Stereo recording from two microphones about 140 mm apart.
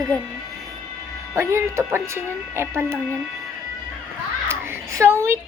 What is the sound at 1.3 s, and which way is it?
Speech, 20° right (ahead or behind).